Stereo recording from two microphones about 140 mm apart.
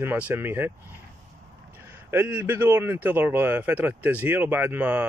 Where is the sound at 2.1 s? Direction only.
15° right (ahead or behind).